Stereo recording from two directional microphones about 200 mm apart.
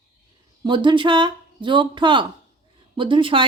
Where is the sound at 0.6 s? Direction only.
25° right (ahead or behind).